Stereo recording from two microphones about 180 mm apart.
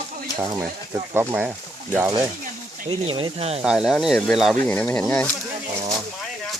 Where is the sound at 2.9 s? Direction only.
30° right (ahead or behind).